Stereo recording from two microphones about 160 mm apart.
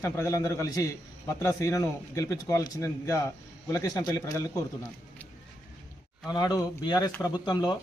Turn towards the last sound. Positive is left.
turn(degrees=25)  # may be behind; listen again after turning